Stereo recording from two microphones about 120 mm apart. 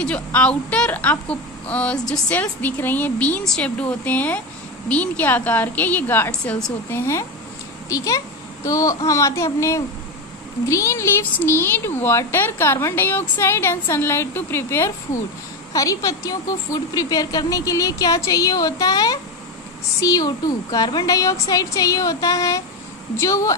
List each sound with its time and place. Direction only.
0.0 s a woman's voice: 10° left (ahead or behind)